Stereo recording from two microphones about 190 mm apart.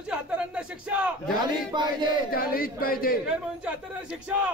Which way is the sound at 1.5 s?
25° right (ahead or behind).